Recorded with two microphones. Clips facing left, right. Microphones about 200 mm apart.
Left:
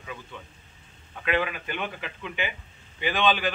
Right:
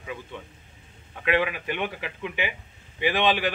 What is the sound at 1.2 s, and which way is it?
A man's voice, 15° right (ahead or behind).